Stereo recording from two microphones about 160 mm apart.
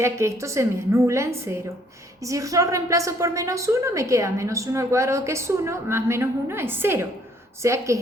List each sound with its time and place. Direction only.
0.0 s a woman's voice: 15° right (ahead or behind)